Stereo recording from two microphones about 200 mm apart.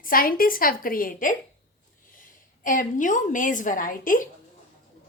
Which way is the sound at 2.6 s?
40° left (ahead or behind).